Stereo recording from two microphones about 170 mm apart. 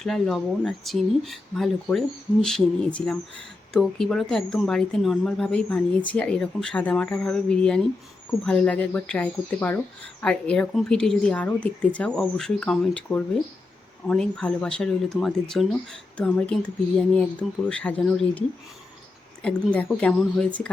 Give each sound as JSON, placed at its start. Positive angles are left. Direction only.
{"t": 0.0, "sound": "speech", "side_deg": 0}